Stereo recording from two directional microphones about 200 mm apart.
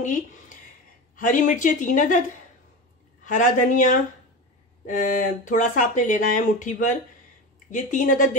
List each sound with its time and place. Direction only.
0.0 s speech: 40° left (ahead or behind)
3.3 s speech: 40° left (ahead or behind)